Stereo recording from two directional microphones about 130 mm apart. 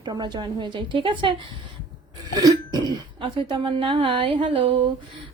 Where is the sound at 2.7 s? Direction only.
35° right (ahead or behind).